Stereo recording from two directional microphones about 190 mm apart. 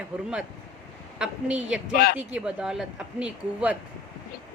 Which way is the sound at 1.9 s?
55° left (ahead or behind).